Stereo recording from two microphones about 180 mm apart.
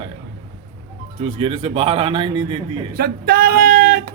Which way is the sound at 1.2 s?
35° right (ahead or behind).